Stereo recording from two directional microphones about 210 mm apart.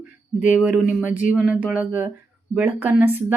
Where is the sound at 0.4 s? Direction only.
5° right (ahead or behind).